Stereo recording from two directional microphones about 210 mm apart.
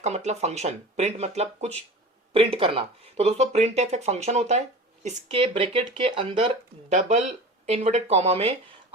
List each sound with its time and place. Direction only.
0.0 s speech: 30° right (ahead or behind)
6.9 s speech: 35° right (ahead or behind)